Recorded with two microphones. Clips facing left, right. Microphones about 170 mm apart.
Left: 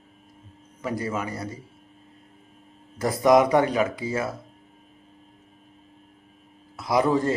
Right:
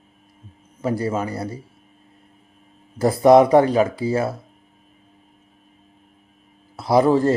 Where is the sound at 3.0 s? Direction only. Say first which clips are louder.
Right 6 dB; 30° right (ahead or behind).